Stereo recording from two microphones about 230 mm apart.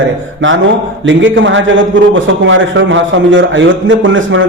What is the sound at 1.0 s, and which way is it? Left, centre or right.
A man's voice, right.